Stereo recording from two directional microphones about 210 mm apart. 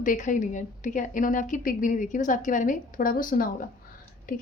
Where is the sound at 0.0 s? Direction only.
40° left (ahead or behind).